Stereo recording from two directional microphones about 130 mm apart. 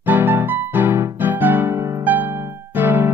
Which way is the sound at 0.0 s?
15° right (ahead or behind).